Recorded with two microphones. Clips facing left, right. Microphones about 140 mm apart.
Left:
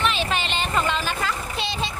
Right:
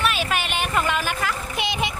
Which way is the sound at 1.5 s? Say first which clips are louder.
Right 2 dB; 15° right (ahead or behind).